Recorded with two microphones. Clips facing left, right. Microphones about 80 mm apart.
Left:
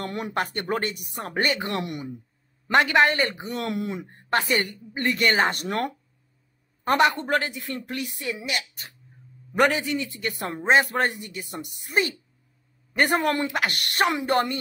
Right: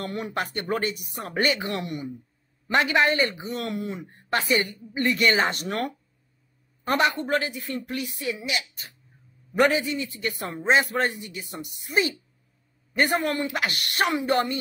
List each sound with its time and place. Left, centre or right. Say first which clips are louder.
0.0 s a woman's voice: left 1 dB; left
1.3 s speech: right 1 dB; left
1.7 s a woman's voice: left 1 dB; left
4.9 s a woman's voice: even; left
10.0 s speech: even; left
10.6 s a woman's voice: left 1 dB; left
12.9 s a woman's voice: left 2 dB; left
13.5 s a woman's voice: left 1 dB; left